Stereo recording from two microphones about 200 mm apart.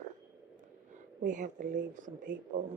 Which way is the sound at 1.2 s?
40° right (ahead or behind).